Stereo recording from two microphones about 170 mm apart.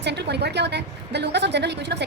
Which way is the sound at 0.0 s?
80° right.